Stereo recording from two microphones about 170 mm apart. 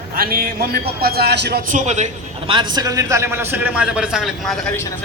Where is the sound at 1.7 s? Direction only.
45° right (ahead or behind).